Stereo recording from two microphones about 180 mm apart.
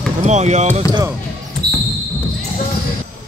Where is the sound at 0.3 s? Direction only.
40° right (ahead or behind).